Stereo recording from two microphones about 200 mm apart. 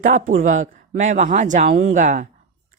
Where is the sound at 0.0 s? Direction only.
40° right (ahead or behind).